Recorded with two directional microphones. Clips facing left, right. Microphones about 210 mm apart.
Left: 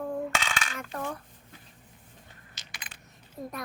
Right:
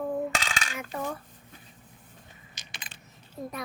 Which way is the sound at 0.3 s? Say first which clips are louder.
Even; 35° right (ahead or behind).